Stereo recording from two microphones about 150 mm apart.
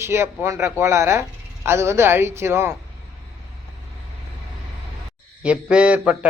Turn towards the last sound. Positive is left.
turn(degrees=-10)  # may be behind; listen again after turning